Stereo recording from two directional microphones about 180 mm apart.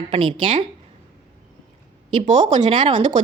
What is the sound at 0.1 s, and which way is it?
Speech, 30° right (ahead or behind).